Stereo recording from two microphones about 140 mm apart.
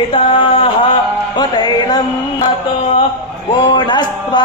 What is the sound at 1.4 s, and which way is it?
Music, 30° left (ahead or behind).